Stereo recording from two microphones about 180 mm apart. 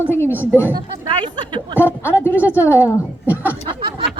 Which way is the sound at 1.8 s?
15° left (ahead or behind).